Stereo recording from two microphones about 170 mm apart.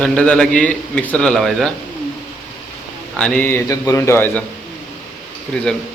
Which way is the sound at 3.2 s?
10° left (ahead or behind).